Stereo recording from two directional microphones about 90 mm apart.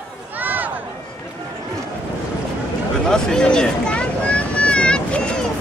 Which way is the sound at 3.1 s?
10° left (ahead or behind).